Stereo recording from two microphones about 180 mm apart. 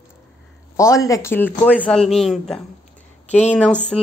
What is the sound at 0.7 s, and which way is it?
Speech, 15° left (ahead or behind).